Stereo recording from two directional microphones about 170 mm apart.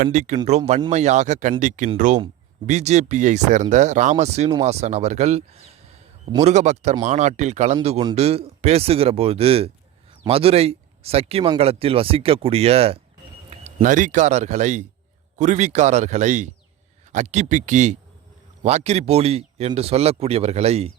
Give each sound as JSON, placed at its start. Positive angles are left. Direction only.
{"t": 0.0, "sound": "speech", "side_deg": -45}
{"t": 13.5, "sound": "a sound", "side_deg": -35}
{"t": 13.8, "sound": "speech", "side_deg": -50}